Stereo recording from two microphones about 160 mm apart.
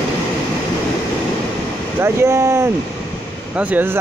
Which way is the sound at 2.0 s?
15° right (ahead or behind).